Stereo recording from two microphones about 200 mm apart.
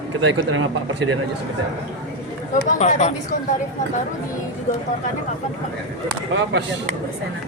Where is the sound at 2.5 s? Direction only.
40° left (ahead or behind).